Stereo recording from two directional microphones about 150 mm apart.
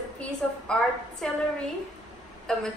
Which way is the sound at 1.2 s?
5° left (ahead or behind).